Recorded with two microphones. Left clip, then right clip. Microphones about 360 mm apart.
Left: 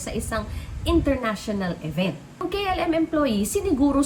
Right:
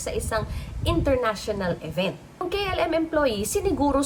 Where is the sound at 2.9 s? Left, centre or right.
Right.